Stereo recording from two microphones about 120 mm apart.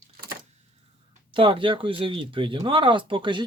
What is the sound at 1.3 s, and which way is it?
Speech, 45° right (ahead or behind).